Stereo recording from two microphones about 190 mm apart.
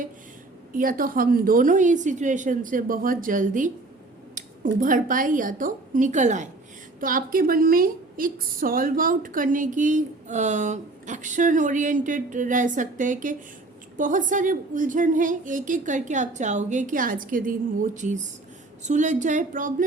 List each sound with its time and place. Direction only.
0.7 s a woman's voice: 45° right (ahead or behind)